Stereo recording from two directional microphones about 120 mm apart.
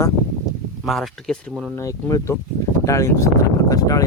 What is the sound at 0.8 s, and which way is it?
Speech, centre (ahead or behind).